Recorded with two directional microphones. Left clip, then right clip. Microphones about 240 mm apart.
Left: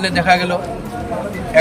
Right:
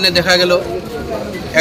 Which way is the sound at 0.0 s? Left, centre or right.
Centre.